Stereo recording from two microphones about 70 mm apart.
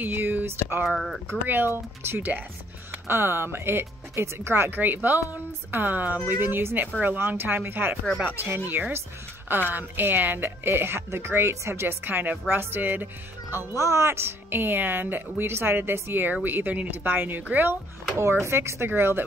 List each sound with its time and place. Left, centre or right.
0.0 s speech: right
0.8 s speech: centre
1.5 s a woman's voice: right
13.7 s a woman's voice: right